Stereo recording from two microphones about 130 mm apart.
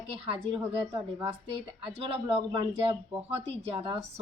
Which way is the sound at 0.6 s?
15° right (ahead or behind).